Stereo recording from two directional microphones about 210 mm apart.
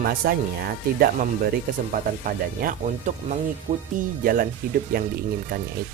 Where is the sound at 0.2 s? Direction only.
50° right (ahead or behind).